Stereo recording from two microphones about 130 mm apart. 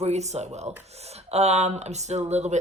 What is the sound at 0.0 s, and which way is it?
Speech, 60° right (ahead or behind).